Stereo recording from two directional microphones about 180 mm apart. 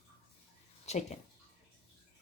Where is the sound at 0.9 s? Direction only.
40° left (ahead or behind).